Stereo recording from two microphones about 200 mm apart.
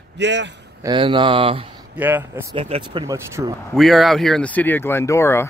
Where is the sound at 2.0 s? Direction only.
10° right (ahead or behind).